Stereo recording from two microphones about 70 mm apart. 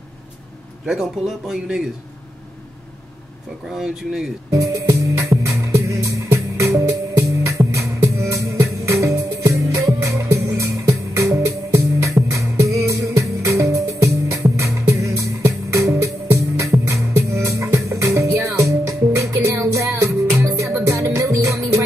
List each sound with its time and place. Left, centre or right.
0.8 s a man's voice: centre
3.6 s speech: centre
4.5 s music: right